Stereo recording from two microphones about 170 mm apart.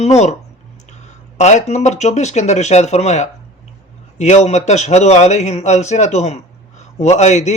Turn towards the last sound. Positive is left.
turn(degrees=45)  # may be behind; listen again after turning